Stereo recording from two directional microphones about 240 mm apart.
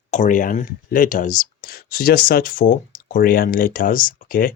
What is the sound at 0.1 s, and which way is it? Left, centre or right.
Speech, left.